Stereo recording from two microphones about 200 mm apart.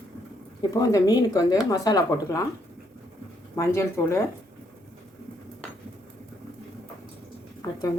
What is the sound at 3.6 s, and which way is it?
Speech, 15° left (ahead or behind).